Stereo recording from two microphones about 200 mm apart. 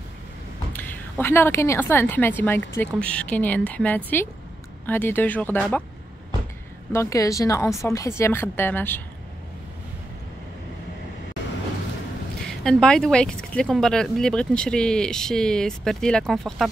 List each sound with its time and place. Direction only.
0.7 s a woman's voice: 10° left (ahead or behind)
6.9 s a woman's voice: 15° left (ahead or behind)
12.4 s speech: 5° left (ahead or behind)